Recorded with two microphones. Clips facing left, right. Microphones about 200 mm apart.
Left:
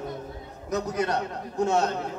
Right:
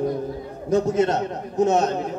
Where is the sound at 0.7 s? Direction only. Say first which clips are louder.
Right 7 dB; 25° right (ahead or behind).